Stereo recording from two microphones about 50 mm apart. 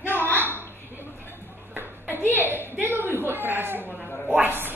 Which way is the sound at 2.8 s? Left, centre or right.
Right.